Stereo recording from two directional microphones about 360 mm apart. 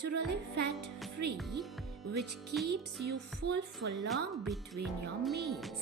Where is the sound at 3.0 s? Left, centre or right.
Right.